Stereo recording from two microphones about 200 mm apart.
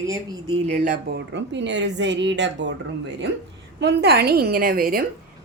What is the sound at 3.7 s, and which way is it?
A woman's voice, 55° right (ahead or behind).